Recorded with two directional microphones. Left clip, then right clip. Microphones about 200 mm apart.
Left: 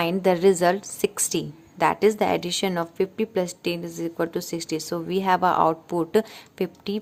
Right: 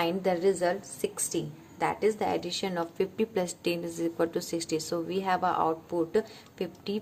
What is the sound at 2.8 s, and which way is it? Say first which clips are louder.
Speech: left 4 dB; 20° left (ahead or behind).